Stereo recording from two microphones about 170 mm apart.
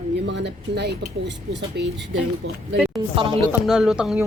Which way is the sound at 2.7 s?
Centre (ahead or behind).